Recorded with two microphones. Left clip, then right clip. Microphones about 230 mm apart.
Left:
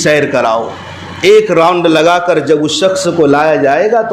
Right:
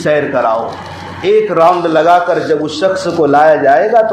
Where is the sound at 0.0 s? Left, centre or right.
Left.